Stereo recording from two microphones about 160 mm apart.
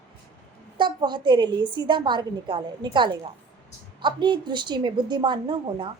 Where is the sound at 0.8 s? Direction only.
30° right (ahead or behind).